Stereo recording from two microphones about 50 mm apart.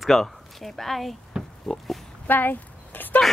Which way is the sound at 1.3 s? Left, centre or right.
Right.